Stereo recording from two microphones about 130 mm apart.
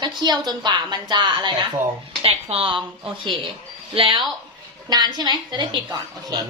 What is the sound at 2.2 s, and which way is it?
Speech, 50° right (ahead or behind).